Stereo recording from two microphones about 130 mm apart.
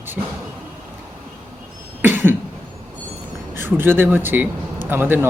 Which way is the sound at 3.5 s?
15° right (ahead or behind).